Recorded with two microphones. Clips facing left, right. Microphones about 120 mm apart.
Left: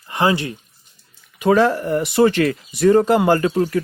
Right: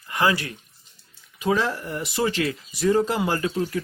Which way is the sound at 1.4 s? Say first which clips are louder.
Left 8 dB; 60° left (ahead or behind).